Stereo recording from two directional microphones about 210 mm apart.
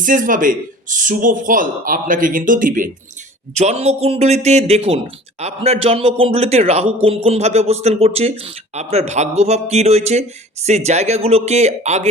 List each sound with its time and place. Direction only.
0.0 s a man's voice: 40° right (ahead or behind)